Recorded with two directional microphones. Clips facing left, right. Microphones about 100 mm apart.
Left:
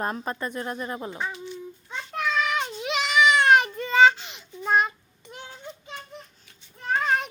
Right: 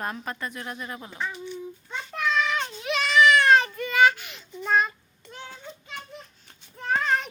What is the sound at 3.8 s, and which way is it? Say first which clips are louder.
Child singing: left 2 dB; 25° left (ahead or behind).